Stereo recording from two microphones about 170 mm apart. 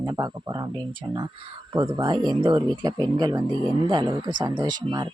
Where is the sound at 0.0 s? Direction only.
25° right (ahead or behind).